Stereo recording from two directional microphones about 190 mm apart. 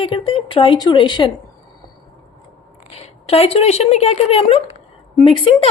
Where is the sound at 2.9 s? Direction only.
30° left (ahead or behind).